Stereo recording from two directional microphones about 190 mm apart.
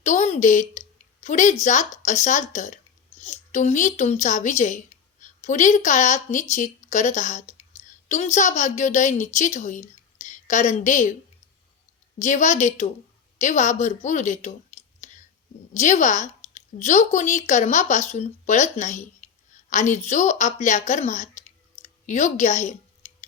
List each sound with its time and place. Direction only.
0.0 s a sound: 40° left (ahead or behind)
1.6 s a woman's voice: 40° left (ahead or behind)
12.2 s a woman's voice: 40° left (ahead or behind)
15.7 s a woman's voice: 40° left (ahead or behind)